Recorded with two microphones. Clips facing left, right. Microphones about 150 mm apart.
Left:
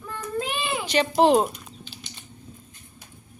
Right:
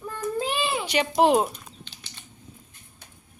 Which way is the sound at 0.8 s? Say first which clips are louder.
Left 2 dB; 10° right (ahead or behind).